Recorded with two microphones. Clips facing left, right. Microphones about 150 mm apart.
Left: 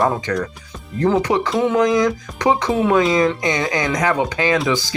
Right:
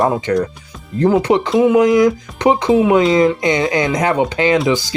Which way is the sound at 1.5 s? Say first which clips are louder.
Right 9 dB; centre (ahead or behind).